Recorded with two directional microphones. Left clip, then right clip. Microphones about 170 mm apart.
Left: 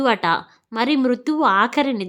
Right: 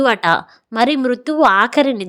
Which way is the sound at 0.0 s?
30° right (ahead or behind).